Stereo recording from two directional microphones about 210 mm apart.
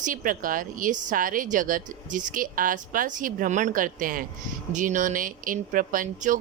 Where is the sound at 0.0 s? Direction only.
40° right (ahead or behind).